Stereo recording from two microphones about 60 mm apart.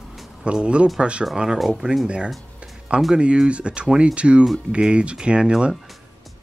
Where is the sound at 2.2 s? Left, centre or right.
Centre.